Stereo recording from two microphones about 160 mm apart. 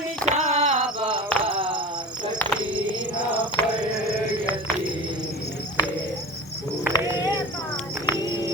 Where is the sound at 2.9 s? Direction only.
30° right (ahead or behind).